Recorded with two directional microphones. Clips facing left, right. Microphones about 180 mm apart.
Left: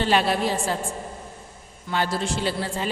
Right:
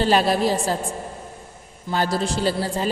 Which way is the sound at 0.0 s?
40° right (ahead or behind).